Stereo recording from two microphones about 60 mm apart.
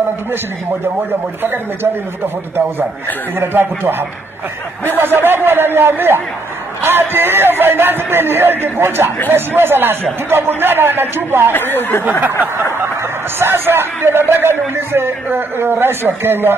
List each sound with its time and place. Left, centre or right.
0.3 s speech: right
3.3 s speech: right
11.5 s speech: left
12.0 s speech: right
13.4 s speech: right